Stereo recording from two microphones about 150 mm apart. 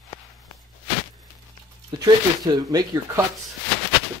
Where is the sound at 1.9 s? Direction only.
25° right (ahead or behind).